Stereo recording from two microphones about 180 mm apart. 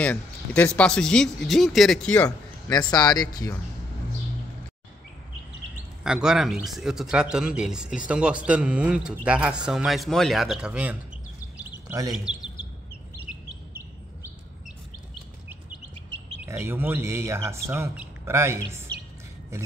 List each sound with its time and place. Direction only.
0.0 s speech: 5° left (ahead or behind)
2.9 s speech: 20° left (ahead or behind)
6.0 s speech: 5° right (ahead or behind)
12.3 s speech: 5° right (ahead or behind)
16.3 s speech: 10° right (ahead or behind)